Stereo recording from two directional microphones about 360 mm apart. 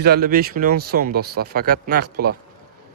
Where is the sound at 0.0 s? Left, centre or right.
Right.